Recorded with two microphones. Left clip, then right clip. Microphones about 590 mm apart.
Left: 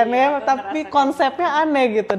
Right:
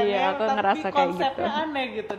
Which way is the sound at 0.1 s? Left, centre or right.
Left.